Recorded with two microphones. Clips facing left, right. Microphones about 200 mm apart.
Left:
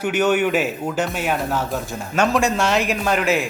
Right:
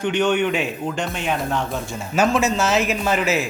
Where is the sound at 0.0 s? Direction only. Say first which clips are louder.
Left 1 dB; 5° left (ahead or behind).